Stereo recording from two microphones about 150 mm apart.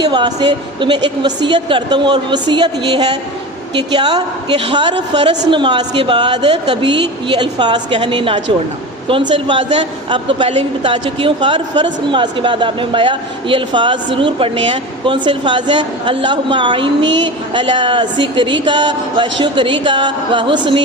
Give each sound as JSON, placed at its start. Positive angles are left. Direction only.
{"t": 0.0, "sound": "speech", "side_deg": -30}